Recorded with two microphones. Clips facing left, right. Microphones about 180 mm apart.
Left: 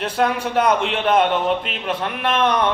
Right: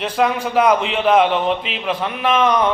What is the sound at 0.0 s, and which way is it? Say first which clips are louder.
A man's voice: right 2 dB; centre (ahead or behind).